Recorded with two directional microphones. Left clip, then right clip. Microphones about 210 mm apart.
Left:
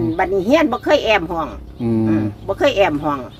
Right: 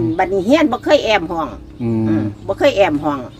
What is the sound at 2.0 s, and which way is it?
A woman's voice, 15° right (ahead or behind).